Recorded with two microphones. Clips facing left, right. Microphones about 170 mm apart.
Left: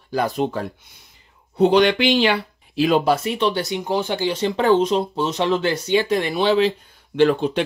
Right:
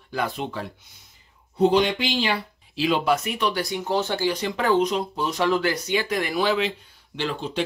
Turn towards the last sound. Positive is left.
turn(degrees=55)  # may be behind; listen again after turning